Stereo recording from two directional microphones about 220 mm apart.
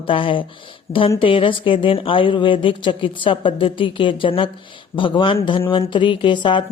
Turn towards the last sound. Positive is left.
turn(degrees=20)  # may be behind; listen again after turning